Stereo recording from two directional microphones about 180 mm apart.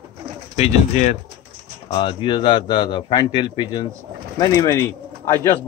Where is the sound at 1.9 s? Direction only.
30° left (ahead or behind).